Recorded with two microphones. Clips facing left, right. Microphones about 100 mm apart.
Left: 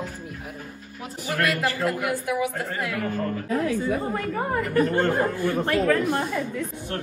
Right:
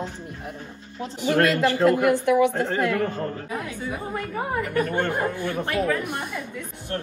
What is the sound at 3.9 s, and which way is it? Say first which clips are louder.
Speech: left 4 dB; 5° right (ahead or behind).